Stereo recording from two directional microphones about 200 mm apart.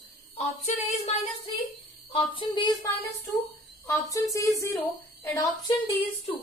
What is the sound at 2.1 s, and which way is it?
Speech, 25° left (ahead or behind).